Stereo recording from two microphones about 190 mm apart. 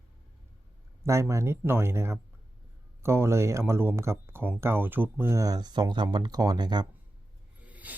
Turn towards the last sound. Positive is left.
turn(degrees=-10)  # may be behind; listen again after turning